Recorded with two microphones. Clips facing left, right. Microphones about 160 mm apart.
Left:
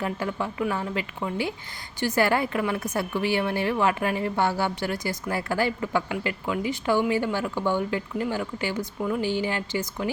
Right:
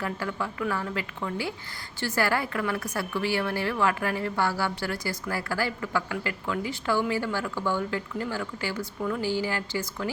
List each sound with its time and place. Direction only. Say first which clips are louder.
0.0 s a woman's voice: left 3 dB; 20° left (ahead or behind)